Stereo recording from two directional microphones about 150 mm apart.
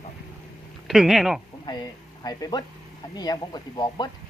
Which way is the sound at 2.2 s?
25° left (ahead or behind).